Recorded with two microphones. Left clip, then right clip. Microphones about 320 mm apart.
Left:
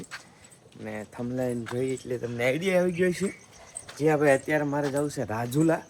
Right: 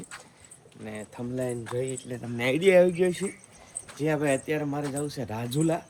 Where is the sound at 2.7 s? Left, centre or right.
Left.